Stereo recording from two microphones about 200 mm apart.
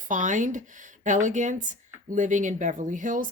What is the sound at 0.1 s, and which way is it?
A woman's voice, 40° right (ahead or behind).